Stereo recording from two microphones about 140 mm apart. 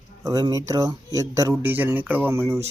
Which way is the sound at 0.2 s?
25° right (ahead or behind).